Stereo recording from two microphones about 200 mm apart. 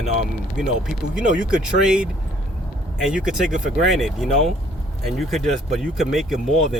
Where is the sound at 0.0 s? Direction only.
35° right (ahead or behind).